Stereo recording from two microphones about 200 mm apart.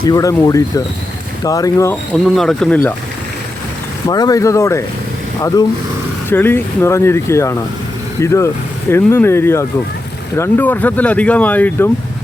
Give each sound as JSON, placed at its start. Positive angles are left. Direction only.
{"t": 0.0, "sound": "speech", "side_deg": 20}
{"t": 2.1, "sound": "speech", "side_deg": 0}
{"t": 4.1, "sound": "speech", "side_deg": 20}
{"t": 6.3, "sound": "speech", "side_deg": 10}